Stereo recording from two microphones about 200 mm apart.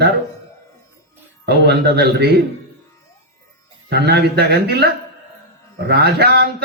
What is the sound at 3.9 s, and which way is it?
A man's voice, 55° right (ahead or behind).